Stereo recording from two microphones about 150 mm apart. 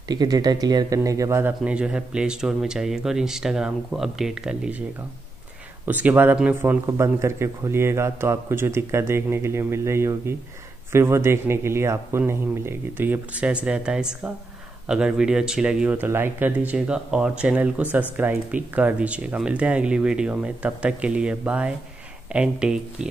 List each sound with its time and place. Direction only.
0.1 s speech: 25° right (ahead or behind)
1.6 s speech: 5° right (ahead or behind)
5.9 s speech: 10° right (ahead or behind)